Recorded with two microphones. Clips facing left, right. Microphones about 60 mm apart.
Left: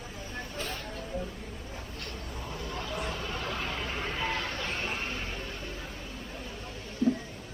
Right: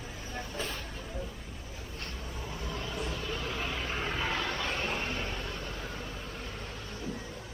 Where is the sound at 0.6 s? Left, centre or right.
Left.